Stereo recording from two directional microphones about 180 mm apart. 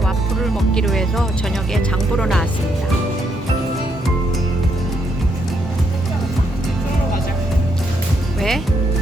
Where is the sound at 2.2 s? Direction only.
Centre (ahead or behind).